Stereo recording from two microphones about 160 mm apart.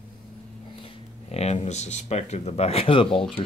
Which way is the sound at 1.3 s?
40° left (ahead or behind).